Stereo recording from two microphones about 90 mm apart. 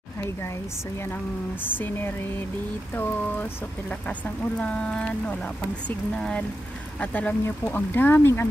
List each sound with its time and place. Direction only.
1.6 s speech: 20° left (ahead or behind)
4.4 s speech: 10° left (ahead or behind)